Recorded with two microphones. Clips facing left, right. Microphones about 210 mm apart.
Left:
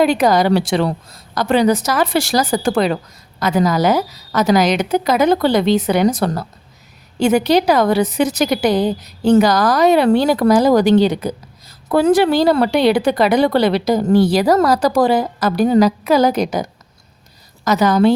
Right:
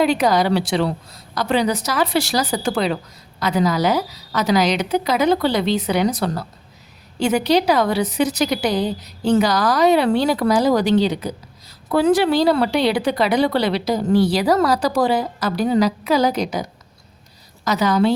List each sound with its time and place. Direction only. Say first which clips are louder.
0.0 s a woman's voice: left 3 dB; 50° left (ahead or behind)
17.7 s a woman's voice: left 4 dB; 50° left (ahead or behind)